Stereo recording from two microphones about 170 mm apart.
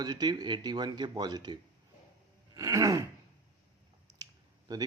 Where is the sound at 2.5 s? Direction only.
20° right (ahead or behind).